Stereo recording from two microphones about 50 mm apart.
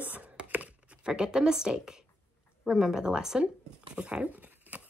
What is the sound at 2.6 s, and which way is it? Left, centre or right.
Speech, centre.